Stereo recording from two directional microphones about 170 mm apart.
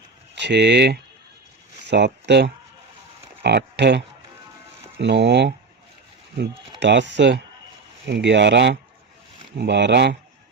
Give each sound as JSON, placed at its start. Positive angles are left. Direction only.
{"t": 0.3, "sound": "speech", "side_deg": -90}
{"t": 6.7, "sound": "speech", "side_deg": -90}